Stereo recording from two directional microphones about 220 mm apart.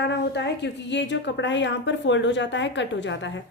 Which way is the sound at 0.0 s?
50° left (ahead or behind).